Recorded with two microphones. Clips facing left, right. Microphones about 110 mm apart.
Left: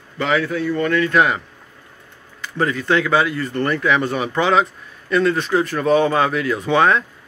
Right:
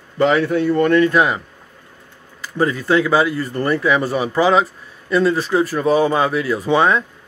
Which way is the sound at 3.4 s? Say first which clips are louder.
Right 2 dB; 10° right (ahead or behind).